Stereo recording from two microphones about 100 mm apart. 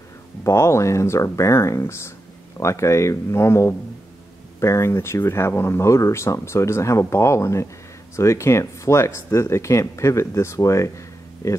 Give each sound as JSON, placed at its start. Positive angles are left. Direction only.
{"t": 0.4, "sound": "speech", "side_deg": 30}